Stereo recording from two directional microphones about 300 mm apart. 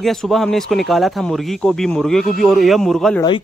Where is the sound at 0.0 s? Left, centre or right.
Centre.